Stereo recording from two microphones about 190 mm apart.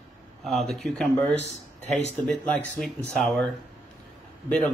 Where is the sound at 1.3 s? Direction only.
35° left (ahead or behind).